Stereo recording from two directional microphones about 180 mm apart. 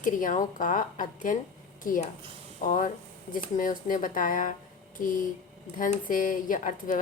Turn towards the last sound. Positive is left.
turn(degrees=50)  # may be behind; listen again after turning